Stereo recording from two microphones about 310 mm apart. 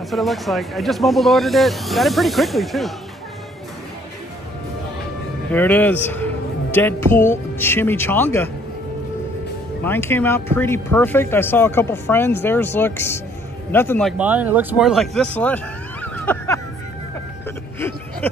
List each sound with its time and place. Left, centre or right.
0.1 s speech: centre
5.5 s speech: centre
9.8 s speech: centre
17.7 s a sound: centre